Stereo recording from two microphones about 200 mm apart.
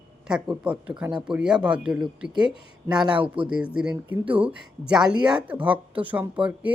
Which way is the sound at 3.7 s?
5° right (ahead or behind).